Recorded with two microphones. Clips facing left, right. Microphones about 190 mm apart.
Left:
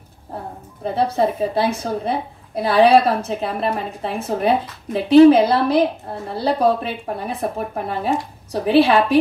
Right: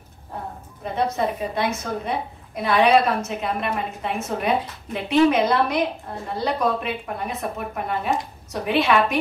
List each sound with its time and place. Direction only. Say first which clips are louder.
0.8 s a woman's voice: left 5 dB; 30° left (ahead or behind)